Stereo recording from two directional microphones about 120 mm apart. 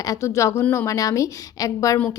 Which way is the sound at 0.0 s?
25° left (ahead or behind).